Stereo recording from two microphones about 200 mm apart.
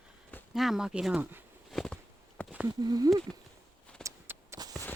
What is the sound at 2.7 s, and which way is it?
Speech, 20° right (ahead or behind).